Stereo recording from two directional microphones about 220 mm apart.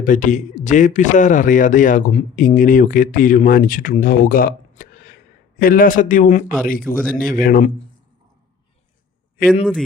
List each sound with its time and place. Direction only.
0.0 s speech: 35° left (ahead or behind)
9.4 s speech: 40° left (ahead or behind)